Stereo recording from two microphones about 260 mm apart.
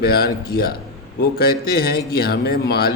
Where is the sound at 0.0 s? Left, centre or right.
Left.